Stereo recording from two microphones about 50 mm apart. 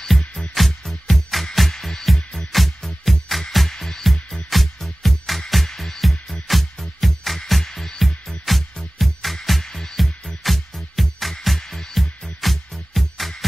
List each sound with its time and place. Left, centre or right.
0.2 s music: centre
0.7 s music: centre